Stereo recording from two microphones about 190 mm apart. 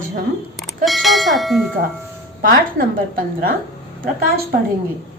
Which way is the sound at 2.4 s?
45° right (ahead or behind).